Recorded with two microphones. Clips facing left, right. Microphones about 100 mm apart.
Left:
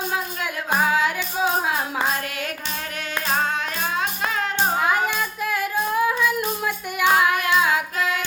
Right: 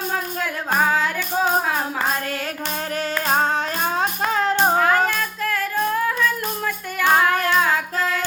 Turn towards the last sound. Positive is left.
turn(degrees=10)  # may be behind; listen again after turning